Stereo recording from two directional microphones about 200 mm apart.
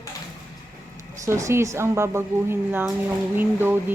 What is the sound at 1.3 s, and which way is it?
Speech, 15° right (ahead or behind).